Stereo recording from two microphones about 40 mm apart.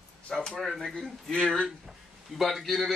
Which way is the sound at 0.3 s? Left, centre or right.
Centre.